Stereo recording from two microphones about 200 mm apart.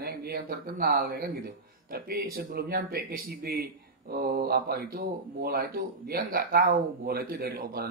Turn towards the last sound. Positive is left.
turn(degrees=-50)  # may be behind; listen again after turning